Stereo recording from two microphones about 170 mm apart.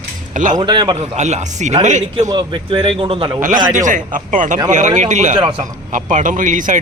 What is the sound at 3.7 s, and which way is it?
Speech, 50° right (ahead or behind).